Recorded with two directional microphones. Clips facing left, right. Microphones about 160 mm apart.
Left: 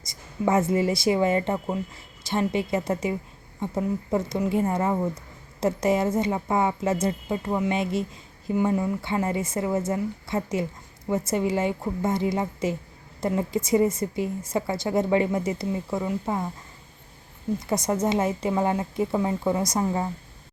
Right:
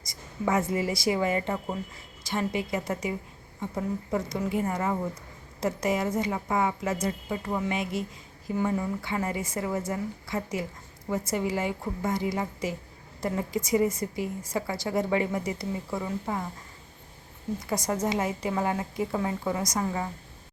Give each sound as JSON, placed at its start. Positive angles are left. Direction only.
{"t": 0.0, "sound": "a woman's voice", "side_deg": 25}
{"t": 17.7, "sound": "a woman's voice", "side_deg": 25}